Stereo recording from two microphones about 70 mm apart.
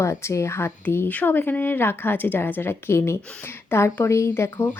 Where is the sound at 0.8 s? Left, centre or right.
Left.